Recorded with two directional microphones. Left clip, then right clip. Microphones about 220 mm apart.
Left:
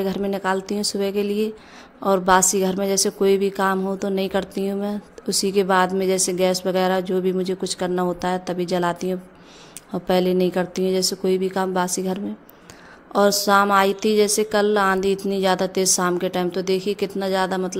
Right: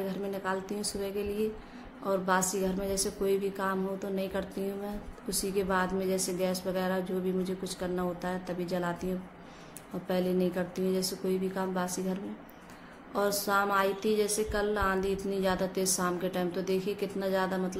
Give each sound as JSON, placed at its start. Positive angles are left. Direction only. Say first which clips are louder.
{"t": 0.1, "sound": "a woman's voice", "louder": "left 11 dB", "side_deg": 40}